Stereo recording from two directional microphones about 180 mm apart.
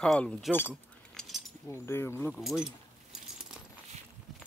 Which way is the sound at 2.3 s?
Centre (ahead or behind).